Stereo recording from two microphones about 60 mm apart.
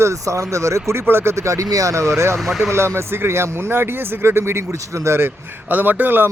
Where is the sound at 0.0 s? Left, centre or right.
Right.